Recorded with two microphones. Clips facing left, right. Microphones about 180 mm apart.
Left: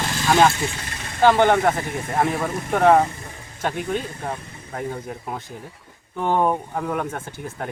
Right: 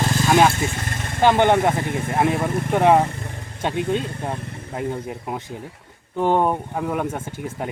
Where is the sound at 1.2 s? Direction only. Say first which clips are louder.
Even; 20° right (ahead or behind).